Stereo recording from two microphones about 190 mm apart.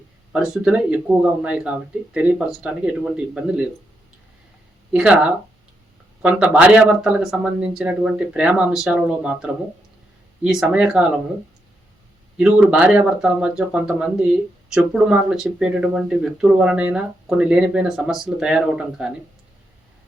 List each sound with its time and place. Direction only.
0.3 s speech: centre (ahead or behind)
4.9 s speech: 5° right (ahead or behind)
12.4 s speech: centre (ahead or behind)